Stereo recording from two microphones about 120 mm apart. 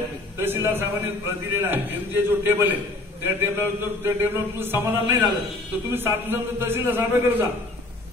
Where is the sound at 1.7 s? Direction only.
15° right (ahead or behind).